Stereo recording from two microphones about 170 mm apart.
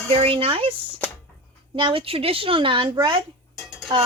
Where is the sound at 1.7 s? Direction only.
30° right (ahead or behind).